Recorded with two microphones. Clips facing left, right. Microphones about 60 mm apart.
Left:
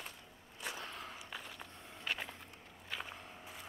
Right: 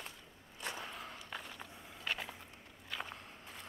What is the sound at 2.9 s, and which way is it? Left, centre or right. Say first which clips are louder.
Walk: right 1 dB; centre.